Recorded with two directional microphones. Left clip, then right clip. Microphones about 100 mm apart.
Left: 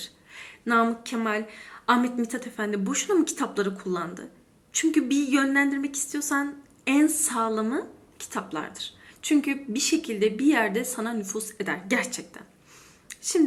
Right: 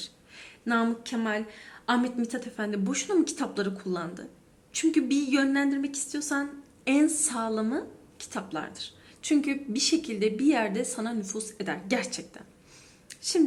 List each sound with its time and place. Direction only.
0.3 s a woman's voice: 40° right (ahead or behind)
9.2 s a woman's voice: 45° right (ahead or behind)